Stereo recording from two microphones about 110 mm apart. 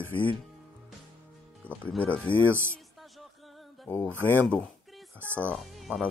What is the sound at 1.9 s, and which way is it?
Speech, 10° left (ahead or behind).